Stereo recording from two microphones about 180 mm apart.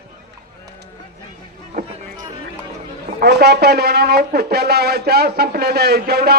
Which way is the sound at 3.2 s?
65° right (ahead or behind).